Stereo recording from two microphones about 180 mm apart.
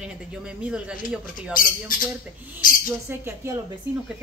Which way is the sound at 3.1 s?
15° right (ahead or behind).